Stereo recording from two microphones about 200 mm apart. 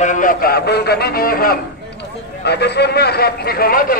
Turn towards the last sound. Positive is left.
turn(degrees=45)  # may be behind; listen again after turning